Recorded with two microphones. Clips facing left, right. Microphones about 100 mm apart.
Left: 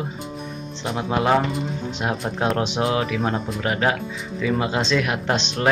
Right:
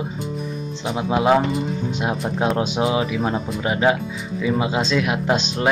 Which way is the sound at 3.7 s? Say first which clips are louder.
Right 3 dB; 20° right (ahead or behind).